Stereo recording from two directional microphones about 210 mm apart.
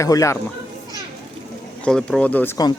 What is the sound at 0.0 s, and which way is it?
Speech, 15° left (ahead or behind).